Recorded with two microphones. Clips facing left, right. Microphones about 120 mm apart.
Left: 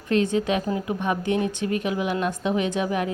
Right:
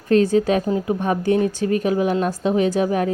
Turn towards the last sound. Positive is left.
turn(degrees=-35)  # may be behind; listen again after turning